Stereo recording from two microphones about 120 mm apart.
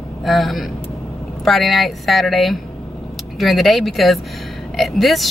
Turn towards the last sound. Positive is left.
turn(degrees=0)  # may be behind; listen again after turning